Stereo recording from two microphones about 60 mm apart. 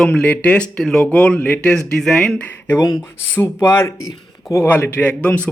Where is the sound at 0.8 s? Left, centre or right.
Centre.